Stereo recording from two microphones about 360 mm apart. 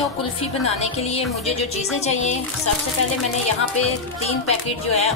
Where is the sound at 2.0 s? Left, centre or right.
Centre.